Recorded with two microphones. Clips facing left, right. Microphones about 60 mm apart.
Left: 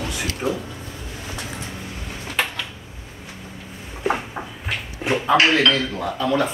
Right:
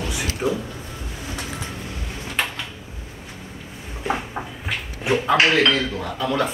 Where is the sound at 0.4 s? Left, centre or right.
Left.